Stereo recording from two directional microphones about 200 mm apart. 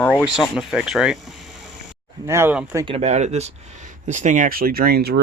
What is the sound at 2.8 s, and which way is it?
Speech, 30° right (ahead or behind).